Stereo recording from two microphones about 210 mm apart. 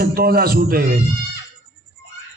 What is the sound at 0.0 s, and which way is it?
A man's voice, 45° right (ahead or behind).